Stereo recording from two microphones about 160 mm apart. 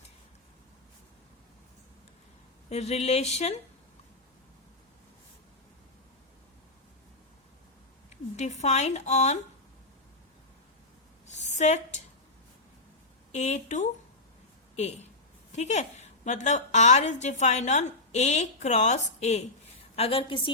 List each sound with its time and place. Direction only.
2.6 s speech: 40° left (ahead or behind)
8.4 s a woman's voice: 45° left (ahead or behind)
11.3 s a sound: 45° left (ahead or behind)
13.3 s a woman's voice: 45° left (ahead or behind)